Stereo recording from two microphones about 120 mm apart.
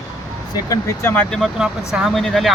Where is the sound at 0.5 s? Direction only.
30° left (ahead or behind).